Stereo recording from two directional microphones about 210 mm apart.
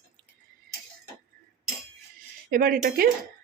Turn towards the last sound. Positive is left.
turn(degrees=-45)  # may be behind; listen again after turning